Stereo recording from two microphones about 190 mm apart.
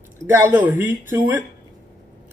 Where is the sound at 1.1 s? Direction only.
10° right (ahead or behind).